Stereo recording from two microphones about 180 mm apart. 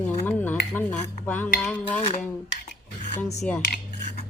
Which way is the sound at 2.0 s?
40° left (ahead or behind).